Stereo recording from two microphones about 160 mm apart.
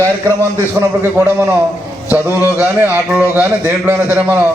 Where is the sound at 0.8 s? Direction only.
10° right (ahead or behind).